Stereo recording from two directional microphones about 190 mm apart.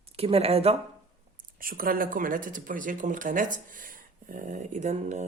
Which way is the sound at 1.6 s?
50° right (ahead or behind).